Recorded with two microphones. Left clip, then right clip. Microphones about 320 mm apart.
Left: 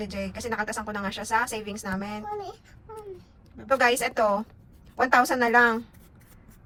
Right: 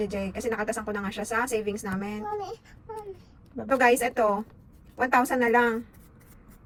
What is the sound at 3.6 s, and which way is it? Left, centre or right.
Speech, centre.